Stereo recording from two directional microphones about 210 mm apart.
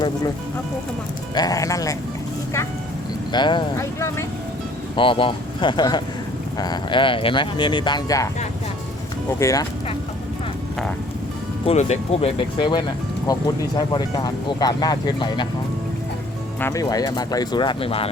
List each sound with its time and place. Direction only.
1.4 s speech: 15° left (ahead or behind)
3.3 s speech: 20° left (ahead or behind)
4.9 s speech: 25° left (ahead or behind)
9.4 s speech: 15° left (ahead or behind)
11.6 s speech: 30° left (ahead or behind)
16.6 s speech: 15° left (ahead or behind)